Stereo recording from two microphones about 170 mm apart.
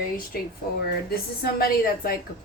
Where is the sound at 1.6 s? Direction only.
60° left (ahead or behind).